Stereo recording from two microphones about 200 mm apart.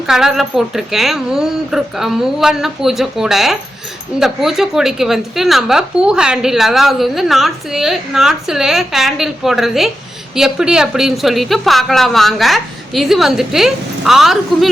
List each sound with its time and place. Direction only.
0.1 s a woman's voice: centre (ahead or behind)